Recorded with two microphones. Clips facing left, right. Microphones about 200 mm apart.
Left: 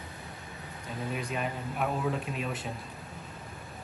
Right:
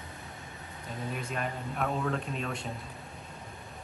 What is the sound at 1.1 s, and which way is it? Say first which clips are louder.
Speech: left 2 dB; centre (ahead or behind).